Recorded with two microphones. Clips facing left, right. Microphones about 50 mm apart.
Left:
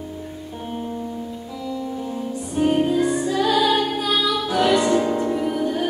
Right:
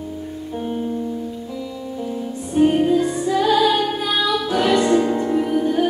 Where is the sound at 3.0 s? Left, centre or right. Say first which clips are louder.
Left 1 dB; centre.